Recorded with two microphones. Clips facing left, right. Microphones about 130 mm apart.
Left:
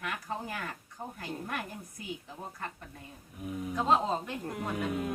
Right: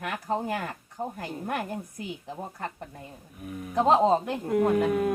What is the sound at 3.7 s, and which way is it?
Speech, 70° right (ahead or behind).